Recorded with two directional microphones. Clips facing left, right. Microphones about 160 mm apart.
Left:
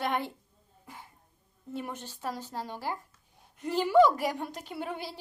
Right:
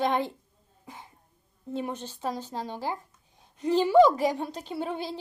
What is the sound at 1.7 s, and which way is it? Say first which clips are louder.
A woman's voice: right 5 dB; 20° right (ahead or behind).